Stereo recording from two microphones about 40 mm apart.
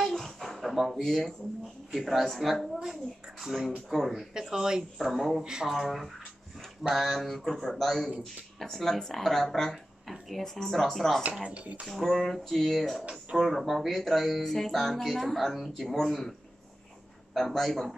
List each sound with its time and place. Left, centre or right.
0.1 s dog: centre
1.0 s speech: centre
4.3 s speech: centre
4.9 s speech: centre
5.4 s speech: centre
5.7 s speech: centre
11.4 s speech: right
11.9 s speech: centre